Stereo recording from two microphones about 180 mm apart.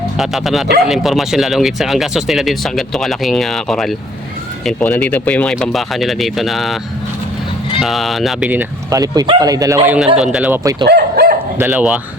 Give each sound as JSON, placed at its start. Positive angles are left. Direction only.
{"t": 0.2, "sound": "speech", "side_deg": 0}
{"t": 7.8, "sound": "speech", "side_deg": 0}
{"t": 10.6, "sound": "speech", "side_deg": -20}
{"t": 10.8, "sound": "dog", "side_deg": -65}
{"t": 11.5, "sound": "speech", "side_deg": -10}